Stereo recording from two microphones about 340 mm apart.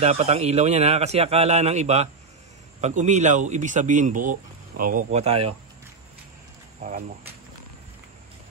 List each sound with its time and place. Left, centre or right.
0.0 s speech: centre
6.8 s speech: right